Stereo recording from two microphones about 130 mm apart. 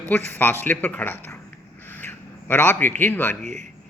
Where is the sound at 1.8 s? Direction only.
15° left (ahead or behind).